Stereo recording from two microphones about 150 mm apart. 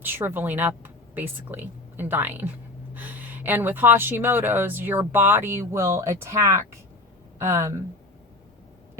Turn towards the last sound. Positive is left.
turn(degrees=-20)  # may be behind; listen again after turning